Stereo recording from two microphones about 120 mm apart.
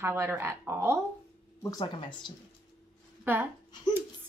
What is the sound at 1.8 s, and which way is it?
Speech, 40° left (ahead or behind).